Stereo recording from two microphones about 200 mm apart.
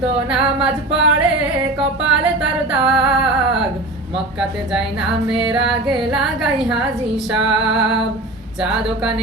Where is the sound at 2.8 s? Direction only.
5° right (ahead or behind).